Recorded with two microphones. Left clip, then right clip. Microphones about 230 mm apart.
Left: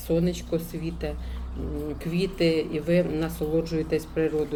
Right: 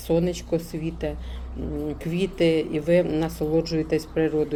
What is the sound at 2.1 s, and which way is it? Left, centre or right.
Speech, right.